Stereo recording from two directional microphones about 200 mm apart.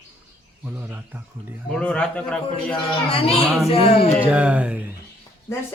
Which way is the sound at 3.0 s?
25° left (ahead or behind).